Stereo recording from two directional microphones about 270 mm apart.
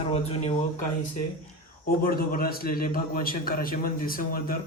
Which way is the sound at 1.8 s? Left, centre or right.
Left.